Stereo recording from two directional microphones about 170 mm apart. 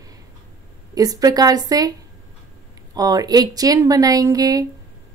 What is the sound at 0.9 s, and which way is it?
Speech, 20° right (ahead or behind).